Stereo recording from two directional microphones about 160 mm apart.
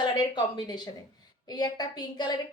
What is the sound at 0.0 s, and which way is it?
A woman's voice, 30° left (ahead or behind).